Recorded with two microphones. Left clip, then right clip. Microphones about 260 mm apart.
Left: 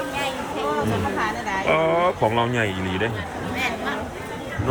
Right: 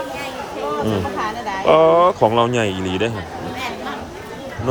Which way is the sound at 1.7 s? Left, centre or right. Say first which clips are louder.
Right 8 dB; centre.